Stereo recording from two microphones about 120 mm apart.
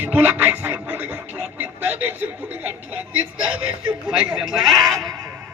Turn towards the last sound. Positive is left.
turn(degrees=0)  # may be behind; listen again after turning